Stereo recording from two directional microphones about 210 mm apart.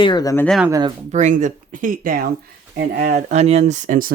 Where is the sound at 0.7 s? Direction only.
20° right (ahead or behind).